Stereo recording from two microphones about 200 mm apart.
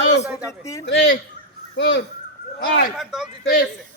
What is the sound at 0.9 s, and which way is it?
A man's voice, 60° left (ahead or behind).